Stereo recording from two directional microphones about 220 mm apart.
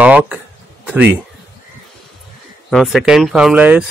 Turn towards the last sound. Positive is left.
turn(degrees=-5)  # may be behind; listen again after turning